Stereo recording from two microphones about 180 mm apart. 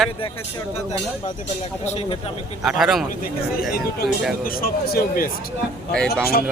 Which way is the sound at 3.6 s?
55° left (ahead or behind).